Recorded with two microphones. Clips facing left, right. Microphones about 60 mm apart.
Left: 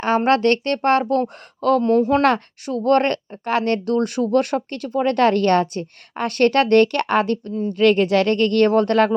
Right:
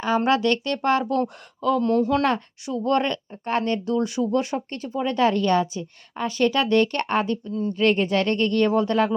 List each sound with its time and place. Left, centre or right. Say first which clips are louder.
0.3 s speech: left 4 dB; left
1.8 s speech: left 2 dB; left
2.6 s speech: left 5 dB; left
7.8 s speech: left 5 dB; left